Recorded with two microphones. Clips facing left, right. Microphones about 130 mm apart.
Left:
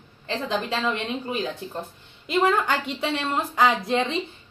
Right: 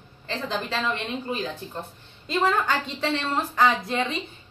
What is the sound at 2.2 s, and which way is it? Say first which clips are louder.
Speech: left 2 dB; 15° left (ahead or behind).